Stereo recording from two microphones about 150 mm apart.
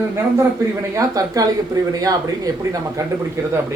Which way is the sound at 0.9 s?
25° right (ahead or behind).